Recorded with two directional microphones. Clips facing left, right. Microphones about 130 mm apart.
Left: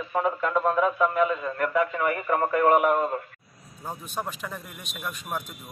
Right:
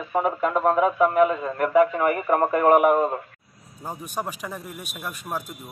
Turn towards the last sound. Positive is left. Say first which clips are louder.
# right 2 dB
turn(degrees=-10)  # may be behind; listen again after turning